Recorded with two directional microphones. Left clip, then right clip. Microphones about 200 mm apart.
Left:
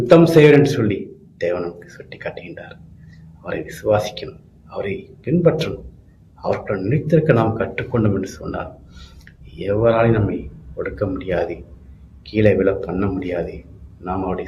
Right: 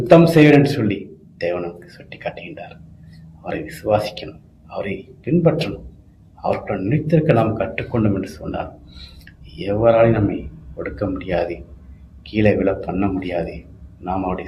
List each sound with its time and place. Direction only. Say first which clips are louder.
0.1 s speech: left 1 dB; 15° left (ahead or behind)
9.6 s speech: right 2 dB; 15° left (ahead or behind)